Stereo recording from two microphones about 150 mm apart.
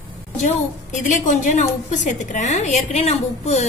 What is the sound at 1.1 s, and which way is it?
A woman's voice, 55° left (ahead or behind).